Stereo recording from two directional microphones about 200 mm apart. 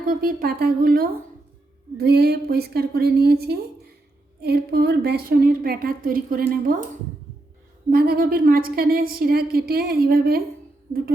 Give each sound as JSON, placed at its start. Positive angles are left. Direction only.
{"t": 0.1, "sound": "a woman's voice", "side_deg": -45}
{"t": 7.9, "sound": "a woman's voice", "side_deg": -50}